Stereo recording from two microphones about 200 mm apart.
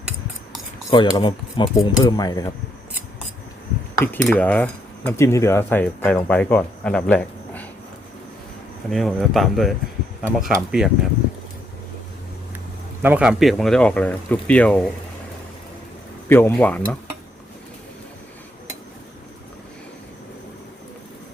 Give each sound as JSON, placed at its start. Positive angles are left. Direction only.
{"t": 0.9, "sound": "speech", "side_deg": 20}
{"t": 3.9, "sound": "speech", "side_deg": 10}
{"t": 8.9, "sound": "speech", "side_deg": 0}
{"t": 13.0, "sound": "speech", "side_deg": -10}
{"t": 16.3, "sound": "speech", "side_deg": 10}